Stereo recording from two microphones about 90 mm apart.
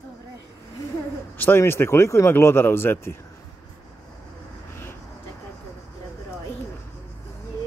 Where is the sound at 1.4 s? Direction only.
25° left (ahead or behind).